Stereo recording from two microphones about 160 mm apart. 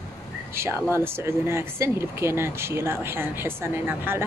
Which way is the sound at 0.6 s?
15° right (ahead or behind).